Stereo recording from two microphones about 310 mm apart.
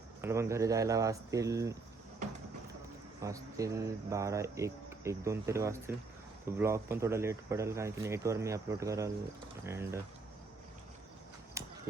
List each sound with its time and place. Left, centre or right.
0.2 s speech: centre
3.2 s speech: centre
11.6 s a sound: centre